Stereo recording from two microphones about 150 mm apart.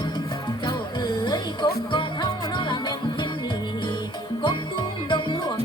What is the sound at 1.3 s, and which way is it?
Music, 30° left (ahead or behind).